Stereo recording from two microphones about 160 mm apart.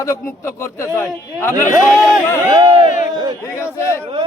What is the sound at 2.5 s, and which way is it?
Speech, 30° right (ahead or behind).